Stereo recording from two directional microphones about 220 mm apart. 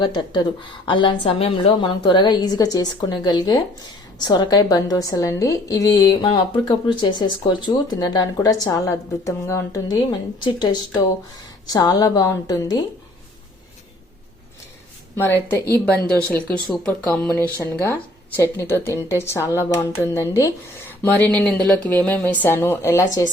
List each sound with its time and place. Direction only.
0.0 s a woman's voice: 20° left (ahead or behind)
15.1 s a woman's voice: 10° left (ahead or behind)